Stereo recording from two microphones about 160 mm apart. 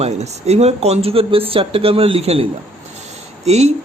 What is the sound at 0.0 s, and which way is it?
Speech, 40° right (ahead or behind).